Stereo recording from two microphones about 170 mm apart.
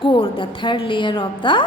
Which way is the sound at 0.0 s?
30° left (ahead or behind).